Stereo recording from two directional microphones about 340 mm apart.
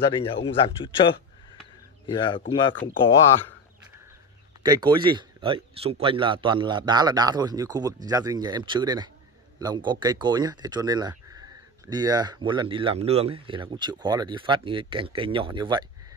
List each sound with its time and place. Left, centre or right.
0.1 s a man's voice: centre
4.6 s speech: centre